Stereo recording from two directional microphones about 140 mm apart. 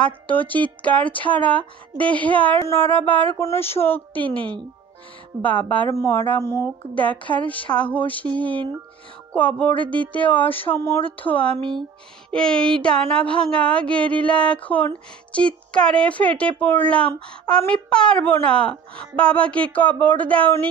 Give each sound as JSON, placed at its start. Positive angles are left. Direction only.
{"t": 0.0, "sound": "a woman's voice", "side_deg": 10}